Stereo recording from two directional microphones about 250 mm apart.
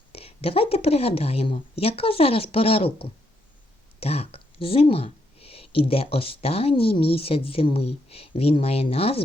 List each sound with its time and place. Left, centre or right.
0.1 s speech: left